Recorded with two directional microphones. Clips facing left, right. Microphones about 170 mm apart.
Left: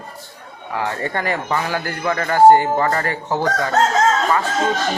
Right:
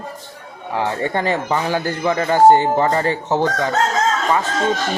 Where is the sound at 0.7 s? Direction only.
20° right (ahead or behind).